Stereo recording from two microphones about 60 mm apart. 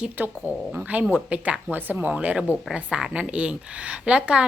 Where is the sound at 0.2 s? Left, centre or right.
Right.